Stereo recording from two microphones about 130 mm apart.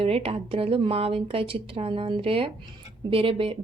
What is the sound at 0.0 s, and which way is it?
A woman's voice, 45° right (ahead or behind).